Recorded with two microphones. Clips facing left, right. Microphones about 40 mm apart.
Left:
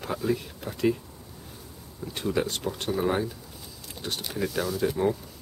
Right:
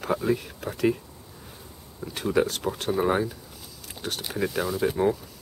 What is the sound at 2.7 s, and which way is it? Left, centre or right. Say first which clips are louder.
Speech: right 3 dB; right.